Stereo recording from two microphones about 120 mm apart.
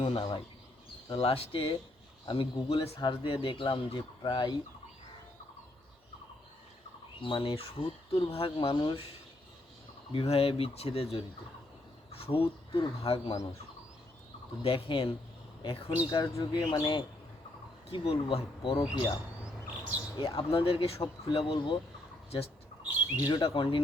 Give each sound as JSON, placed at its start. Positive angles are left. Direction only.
{"t": 0.0, "sound": "speech", "side_deg": 50}
{"t": 7.2, "sound": "speech", "side_deg": 50}
{"t": 10.1, "sound": "speech", "side_deg": 50}
{"t": 13.3, "sound": "speech", "side_deg": 25}
{"t": 14.6, "sound": "speech", "side_deg": 50}
{"t": 16.1, "sound": "speech", "side_deg": 40}
{"t": 17.9, "sound": "speech", "side_deg": 50}
{"t": 20.1, "sound": "speech", "side_deg": 50}
{"t": 22.8, "sound": "squawk", "side_deg": -10}
{"t": 23.4, "sound": "speech", "side_deg": 45}